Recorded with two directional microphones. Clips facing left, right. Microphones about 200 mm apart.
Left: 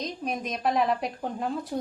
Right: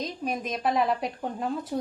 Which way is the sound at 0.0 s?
Centre (ahead or behind).